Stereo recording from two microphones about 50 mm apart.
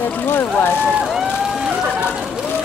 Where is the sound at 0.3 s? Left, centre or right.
Left.